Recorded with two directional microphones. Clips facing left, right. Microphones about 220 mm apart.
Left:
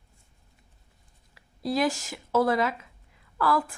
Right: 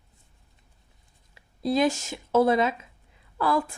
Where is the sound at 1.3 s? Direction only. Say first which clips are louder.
Right 3 dB; 25° right (ahead or behind).